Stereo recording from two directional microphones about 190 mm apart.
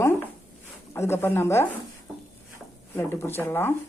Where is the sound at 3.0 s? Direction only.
10° left (ahead or behind).